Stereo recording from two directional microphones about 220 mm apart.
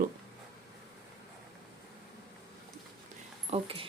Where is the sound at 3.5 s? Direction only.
25° right (ahead or behind).